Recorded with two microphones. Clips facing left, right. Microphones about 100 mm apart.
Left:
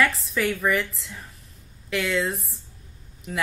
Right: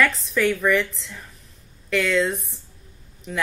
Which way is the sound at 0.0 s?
5° left (ahead or behind).